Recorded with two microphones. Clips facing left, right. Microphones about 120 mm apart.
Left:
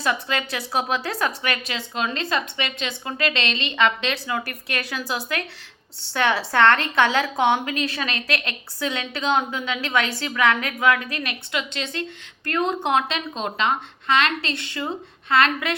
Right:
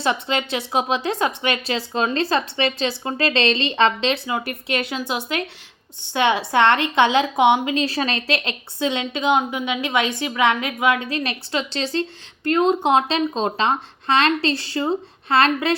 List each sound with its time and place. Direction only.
0.0 s a woman's voice: 25° right (ahead or behind)